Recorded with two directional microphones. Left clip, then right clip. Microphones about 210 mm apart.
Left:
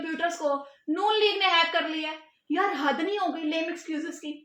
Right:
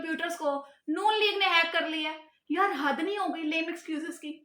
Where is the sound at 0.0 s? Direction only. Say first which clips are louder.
Left 3 dB; 15° right (ahead or behind).